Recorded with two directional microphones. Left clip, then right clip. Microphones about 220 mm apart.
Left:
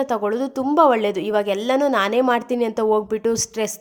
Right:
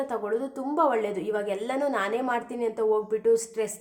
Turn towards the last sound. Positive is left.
turn(degrees=40)  # may be behind; listen again after turning